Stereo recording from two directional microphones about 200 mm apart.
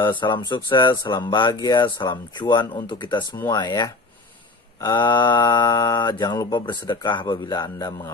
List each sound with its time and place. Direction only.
0.0 s speech: 25° left (ahead or behind)